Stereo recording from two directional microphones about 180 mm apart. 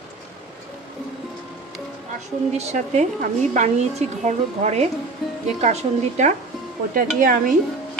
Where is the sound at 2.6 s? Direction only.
40° right (ahead or behind).